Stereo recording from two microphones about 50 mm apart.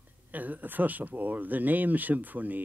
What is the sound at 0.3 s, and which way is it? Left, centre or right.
Speech, right.